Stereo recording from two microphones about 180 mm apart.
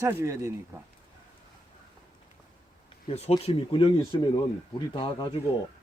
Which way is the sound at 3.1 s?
35° left (ahead or behind).